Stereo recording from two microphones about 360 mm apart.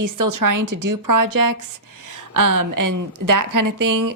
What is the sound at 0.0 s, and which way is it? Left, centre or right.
A woman's voice, right.